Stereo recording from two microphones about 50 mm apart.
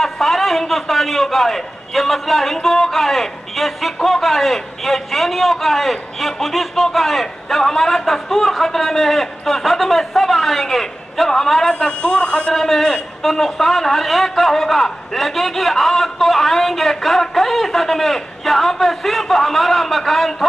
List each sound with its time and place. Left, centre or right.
0.0 s a man's voice: centre
11.7 s a man's voice: centre
12.5 s a man's voice: centre